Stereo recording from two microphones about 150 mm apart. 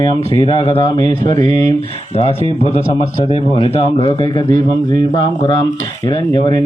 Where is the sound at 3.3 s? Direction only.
35° left (ahead or behind).